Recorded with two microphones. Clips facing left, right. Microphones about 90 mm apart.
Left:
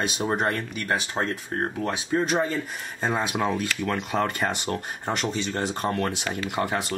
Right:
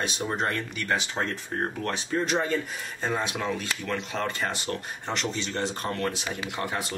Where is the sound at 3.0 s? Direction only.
35° left (ahead or behind).